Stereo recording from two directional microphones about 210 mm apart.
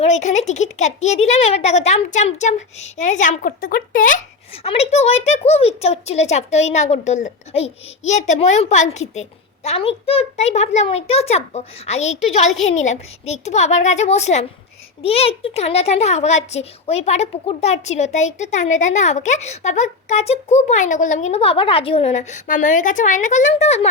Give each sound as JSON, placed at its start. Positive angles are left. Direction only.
{"t": 0.0, "sound": "a child's voice", "side_deg": 35}
{"t": 4.5, "sound": "a child's voice", "side_deg": 30}